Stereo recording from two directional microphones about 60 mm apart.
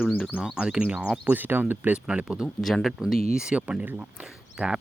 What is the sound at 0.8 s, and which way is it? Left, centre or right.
Speech, right.